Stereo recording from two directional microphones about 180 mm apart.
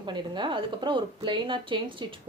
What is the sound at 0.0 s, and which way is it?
A woman's voice, 25° right (ahead or behind).